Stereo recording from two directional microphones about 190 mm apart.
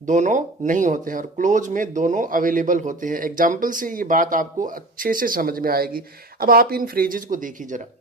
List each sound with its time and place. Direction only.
0.0 s speech: 40° right (ahead or behind)